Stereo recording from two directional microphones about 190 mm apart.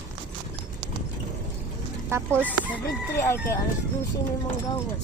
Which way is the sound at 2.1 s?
15° right (ahead or behind).